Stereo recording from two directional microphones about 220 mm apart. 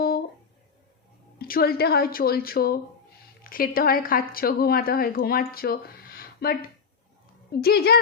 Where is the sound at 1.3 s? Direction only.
45° left (ahead or behind).